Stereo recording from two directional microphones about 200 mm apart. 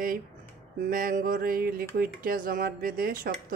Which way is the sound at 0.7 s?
45° right (ahead or behind).